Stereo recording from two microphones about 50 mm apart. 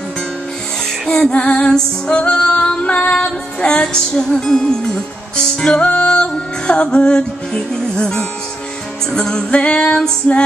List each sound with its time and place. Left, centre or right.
1.2 s music: centre
9.1 s female singing: centre